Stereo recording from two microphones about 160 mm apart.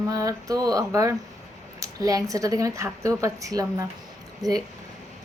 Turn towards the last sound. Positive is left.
turn(degrees=-25)  # may be behind; listen again after turning